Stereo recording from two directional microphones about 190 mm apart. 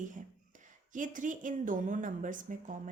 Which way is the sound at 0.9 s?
45° right (ahead or behind).